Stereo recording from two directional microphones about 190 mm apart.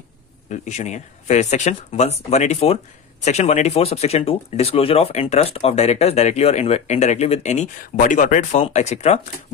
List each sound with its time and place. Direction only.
0.5 s speech: 40° left (ahead or behind)